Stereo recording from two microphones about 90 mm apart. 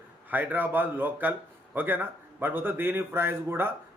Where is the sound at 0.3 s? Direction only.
20° right (ahead or behind).